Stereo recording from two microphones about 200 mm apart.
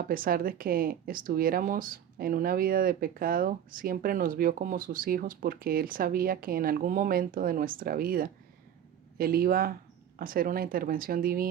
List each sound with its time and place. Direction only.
0.0 s speech: 45° right (ahead or behind)